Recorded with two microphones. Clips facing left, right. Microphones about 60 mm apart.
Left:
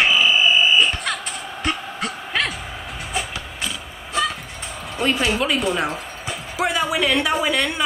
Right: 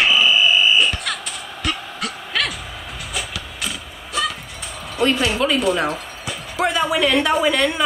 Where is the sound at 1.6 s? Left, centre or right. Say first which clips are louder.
Even; left.